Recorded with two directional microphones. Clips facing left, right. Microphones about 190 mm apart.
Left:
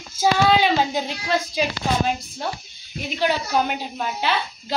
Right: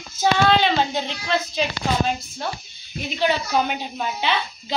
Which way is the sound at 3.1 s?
5° left (ahead or behind).